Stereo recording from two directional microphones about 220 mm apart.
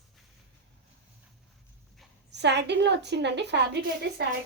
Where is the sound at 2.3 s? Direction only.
50° right (ahead or behind).